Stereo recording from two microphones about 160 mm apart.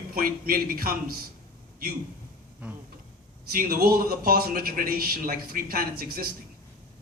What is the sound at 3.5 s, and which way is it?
A man's voice, 70° right (ahead or behind).